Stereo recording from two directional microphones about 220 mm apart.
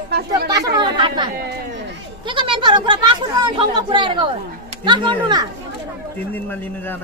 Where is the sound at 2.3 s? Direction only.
20° right (ahead or behind).